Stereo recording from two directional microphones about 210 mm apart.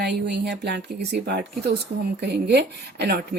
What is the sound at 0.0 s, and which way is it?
Speech, 50° right (ahead or behind).